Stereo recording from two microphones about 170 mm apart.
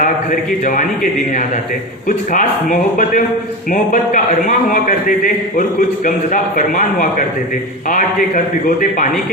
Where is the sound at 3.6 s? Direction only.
50° left (ahead or behind).